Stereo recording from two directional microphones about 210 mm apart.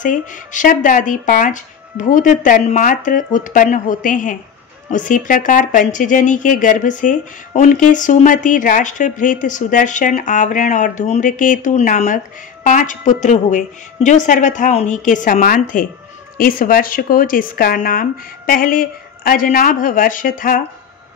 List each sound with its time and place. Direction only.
0.0 s speech: 40° left (ahead or behind)